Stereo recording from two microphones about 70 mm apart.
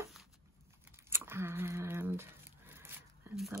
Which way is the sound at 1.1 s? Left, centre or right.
Right.